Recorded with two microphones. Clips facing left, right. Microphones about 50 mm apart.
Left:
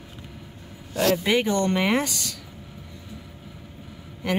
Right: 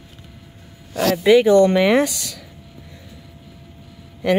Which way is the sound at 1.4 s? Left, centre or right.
Centre.